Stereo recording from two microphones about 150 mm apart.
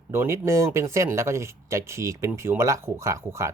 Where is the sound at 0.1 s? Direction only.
15° right (ahead or behind).